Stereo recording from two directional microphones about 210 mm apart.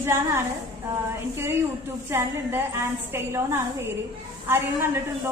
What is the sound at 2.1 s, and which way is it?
A woman's voice, 10° right (ahead or behind).